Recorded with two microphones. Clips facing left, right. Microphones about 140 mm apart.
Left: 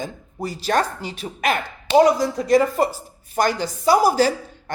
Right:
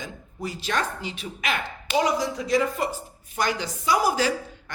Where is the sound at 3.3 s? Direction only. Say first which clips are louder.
Left 6 dB; 40° left (ahead or behind).